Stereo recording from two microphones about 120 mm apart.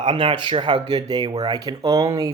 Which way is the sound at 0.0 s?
50° right (ahead or behind).